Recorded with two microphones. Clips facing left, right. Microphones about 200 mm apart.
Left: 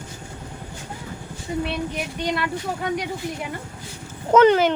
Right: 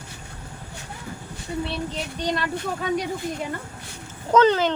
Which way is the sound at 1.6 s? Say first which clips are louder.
Left 1 dB; 15° left (ahead or behind).